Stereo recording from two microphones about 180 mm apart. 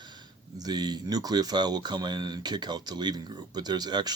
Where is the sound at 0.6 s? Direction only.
25° right (ahead or behind).